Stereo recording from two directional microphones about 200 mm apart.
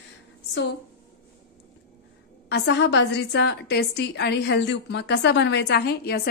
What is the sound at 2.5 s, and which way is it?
A woman's voice, 55° left (ahead or behind).